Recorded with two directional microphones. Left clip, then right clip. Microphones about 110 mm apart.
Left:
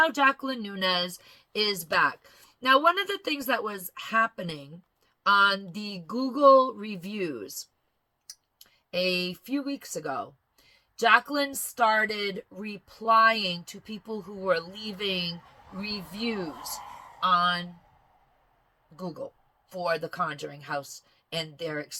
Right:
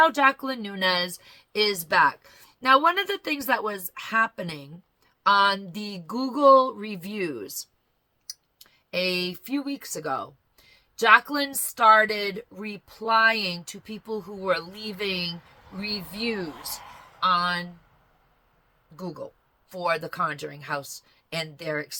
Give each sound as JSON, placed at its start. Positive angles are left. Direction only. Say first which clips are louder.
{"t": 0.0, "sound": "speech", "louder": "right 3 dB", "side_deg": -35}
{"t": 16.8, "sound": "a sound", "louder": "left 2 dB", "side_deg": -15}
{"t": 17.2, "sound": "speech", "louder": "right 1 dB", "side_deg": -35}
{"t": 18.9, "sound": "speech", "louder": "right 1 dB", "side_deg": -30}